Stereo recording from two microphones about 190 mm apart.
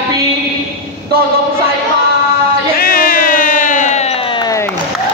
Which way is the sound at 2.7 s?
50° left (ahead or behind).